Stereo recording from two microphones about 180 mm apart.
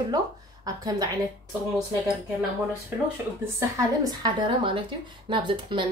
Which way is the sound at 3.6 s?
20° right (ahead or behind).